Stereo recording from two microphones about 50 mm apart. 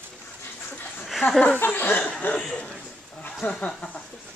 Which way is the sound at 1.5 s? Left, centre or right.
Left.